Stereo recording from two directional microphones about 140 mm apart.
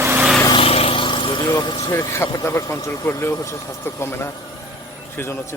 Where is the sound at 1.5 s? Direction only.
30° left (ahead or behind).